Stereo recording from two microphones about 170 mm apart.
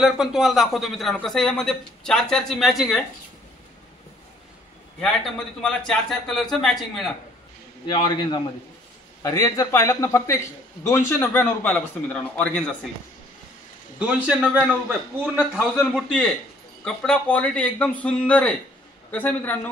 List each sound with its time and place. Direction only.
0.0 s speech: 5° right (ahead or behind)
5.0 s speech: 5° left (ahead or behind)
7.8 s a man's voice: 25° left (ahead or behind); by 12.7 s 10° left (ahead or behind)
13.9 s a man's voice: 5° right (ahead or behind)
16.1 s a man's voice: 5° left (ahead or behind)